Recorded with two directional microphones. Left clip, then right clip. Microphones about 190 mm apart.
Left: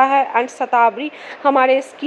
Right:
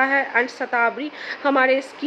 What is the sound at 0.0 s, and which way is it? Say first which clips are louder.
A woman's voice: left 5 dB; 15° left (ahead or behind).